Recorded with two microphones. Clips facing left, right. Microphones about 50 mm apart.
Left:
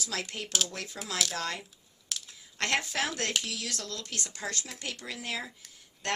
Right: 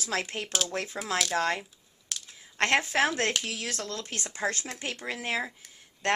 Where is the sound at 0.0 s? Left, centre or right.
Right.